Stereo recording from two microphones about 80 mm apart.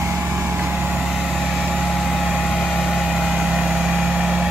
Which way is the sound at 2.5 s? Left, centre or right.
Centre.